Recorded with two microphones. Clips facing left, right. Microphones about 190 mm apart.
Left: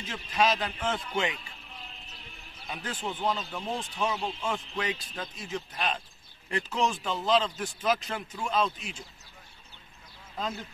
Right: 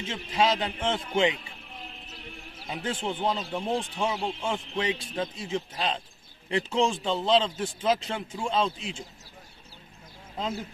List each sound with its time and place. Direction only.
0.0 s speech: 25° right (ahead or behind)
2.6 s speech: 25° right (ahead or behind)